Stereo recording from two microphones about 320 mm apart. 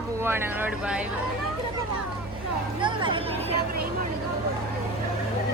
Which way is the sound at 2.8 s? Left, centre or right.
Centre.